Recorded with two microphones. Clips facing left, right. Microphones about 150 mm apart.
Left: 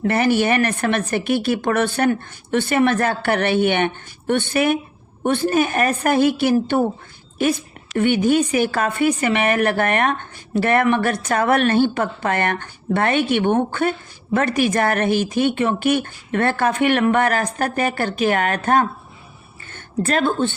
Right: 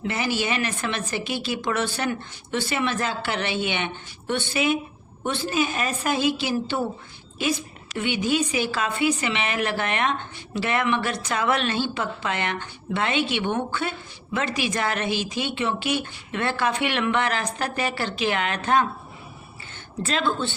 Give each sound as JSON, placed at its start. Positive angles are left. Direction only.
{"t": 0.0, "sound": "a woman's voice", "side_deg": 55}